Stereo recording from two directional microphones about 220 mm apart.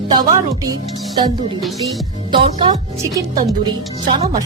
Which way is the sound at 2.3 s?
25° right (ahead or behind).